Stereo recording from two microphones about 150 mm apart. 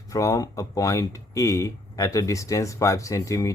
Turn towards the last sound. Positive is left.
turn(degrees=20)  # may be behind; listen again after turning